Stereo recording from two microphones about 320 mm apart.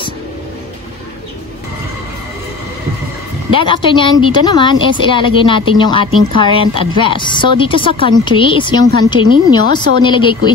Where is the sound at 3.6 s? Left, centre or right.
Centre.